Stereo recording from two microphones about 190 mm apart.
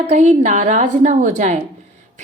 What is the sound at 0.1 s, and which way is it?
A woman's voice, 35° right (ahead or behind).